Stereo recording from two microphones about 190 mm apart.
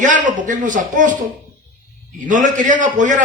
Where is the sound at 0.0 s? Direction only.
40° right (ahead or behind).